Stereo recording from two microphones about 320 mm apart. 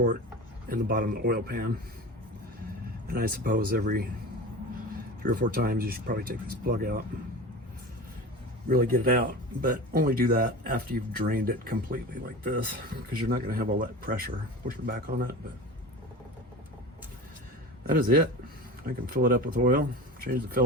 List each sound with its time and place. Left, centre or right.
0.7 s speech: right
3.1 s speech: right
5.2 s speech: right
8.7 s speech: right
13.1 s speech: right
17.8 s speech: right